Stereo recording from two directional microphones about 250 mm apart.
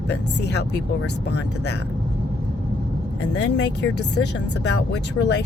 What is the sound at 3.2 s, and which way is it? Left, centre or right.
Speech, left.